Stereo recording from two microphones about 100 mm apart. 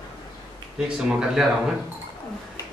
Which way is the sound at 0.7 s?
5° right (ahead or behind).